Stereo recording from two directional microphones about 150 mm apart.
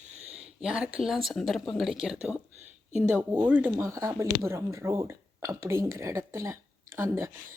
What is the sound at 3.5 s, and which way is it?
Speech, 10° right (ahead or behind).